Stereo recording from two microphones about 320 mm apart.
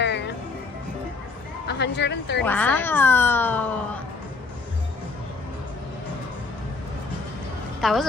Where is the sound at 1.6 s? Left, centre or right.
Left.